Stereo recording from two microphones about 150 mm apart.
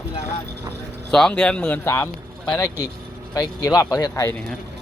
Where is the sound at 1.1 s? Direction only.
5° left (ahead or behind).